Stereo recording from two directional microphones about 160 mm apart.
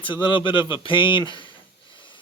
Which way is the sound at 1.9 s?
30° left (ahead or behind).